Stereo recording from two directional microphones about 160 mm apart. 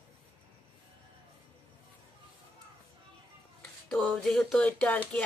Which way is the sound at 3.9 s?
Centre (ahead or behind).